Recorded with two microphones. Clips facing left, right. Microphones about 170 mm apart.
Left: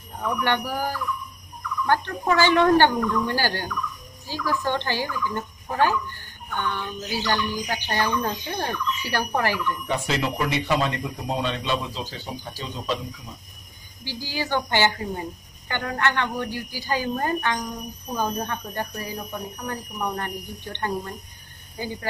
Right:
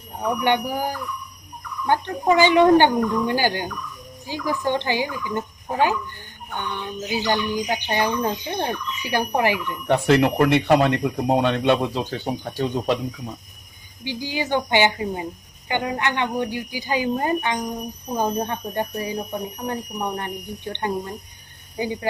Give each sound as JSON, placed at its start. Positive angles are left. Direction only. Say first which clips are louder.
{"t": 0.2, "sound": "a woman's voice", "louder": "right 4 dB", "side_deg": -15}
{"t": 9.8, "sound": "speech", "louder": "right 11 dB", "side_deg": -60}
{"t": 14.0, "sound": "a woman's voice", "louder": "right 4 dB", "side_deg": -20}